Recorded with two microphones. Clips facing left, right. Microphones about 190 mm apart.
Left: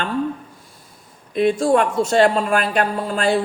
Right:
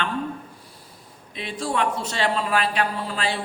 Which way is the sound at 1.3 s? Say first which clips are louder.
Left 11 dB; 50° left (ahead or behind).